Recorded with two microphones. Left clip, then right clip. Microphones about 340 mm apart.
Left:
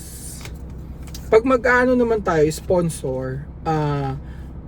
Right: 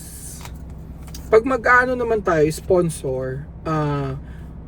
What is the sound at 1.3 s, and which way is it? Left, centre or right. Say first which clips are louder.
Speech: right 1 dB; centre.